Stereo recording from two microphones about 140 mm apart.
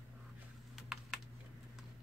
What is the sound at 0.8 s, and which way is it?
Typing, centre (ahead or behind).